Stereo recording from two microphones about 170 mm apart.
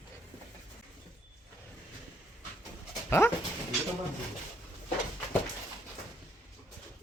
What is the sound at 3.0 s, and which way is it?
Dog, 15° left (ahead or behind).